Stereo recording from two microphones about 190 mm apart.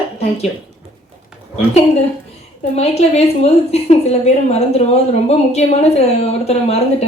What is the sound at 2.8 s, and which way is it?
A woman's voice, 35° left (ahead or behind).